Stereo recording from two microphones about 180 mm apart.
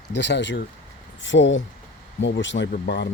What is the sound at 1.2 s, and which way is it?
Speech, 90° left.